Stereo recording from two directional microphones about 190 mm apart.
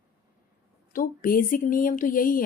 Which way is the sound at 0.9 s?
45° left (ahead or behind).